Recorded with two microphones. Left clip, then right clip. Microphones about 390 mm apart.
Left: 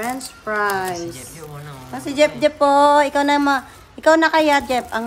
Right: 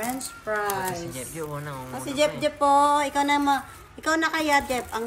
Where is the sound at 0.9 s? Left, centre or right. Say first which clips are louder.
Left 3 dB; centre.